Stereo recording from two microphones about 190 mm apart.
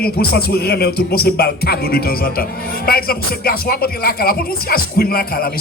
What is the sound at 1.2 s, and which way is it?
Speech, 55° left (ahead or behind).